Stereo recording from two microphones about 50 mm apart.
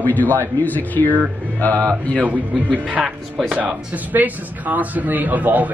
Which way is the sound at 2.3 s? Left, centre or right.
Right.